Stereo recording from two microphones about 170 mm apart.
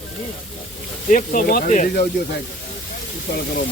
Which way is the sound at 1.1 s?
50° left (ahead or behind).